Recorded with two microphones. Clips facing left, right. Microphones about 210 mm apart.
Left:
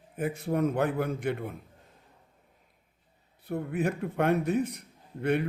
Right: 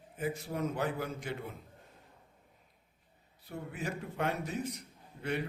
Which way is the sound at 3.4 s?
55° left (ahead or behind).